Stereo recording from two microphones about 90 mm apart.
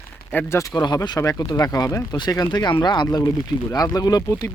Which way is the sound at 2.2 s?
50° left (ahead or behind).